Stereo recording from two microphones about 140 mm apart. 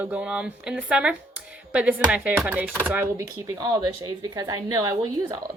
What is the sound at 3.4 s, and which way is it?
A woman's voice, 25° right (ahead or behind).